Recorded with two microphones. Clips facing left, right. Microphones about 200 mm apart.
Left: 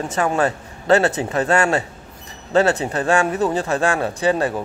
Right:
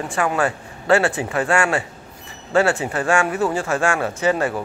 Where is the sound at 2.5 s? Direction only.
20° left (ahead or behind).